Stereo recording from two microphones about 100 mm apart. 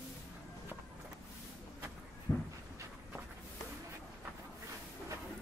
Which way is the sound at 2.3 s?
25° left (ahead or behind).